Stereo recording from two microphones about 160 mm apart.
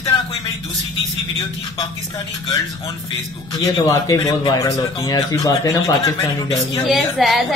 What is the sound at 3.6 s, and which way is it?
Speech, 20° left (ahead or behind).